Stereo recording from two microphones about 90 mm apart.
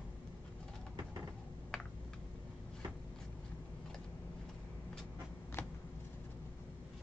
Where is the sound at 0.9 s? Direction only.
45° right (ahead or behind).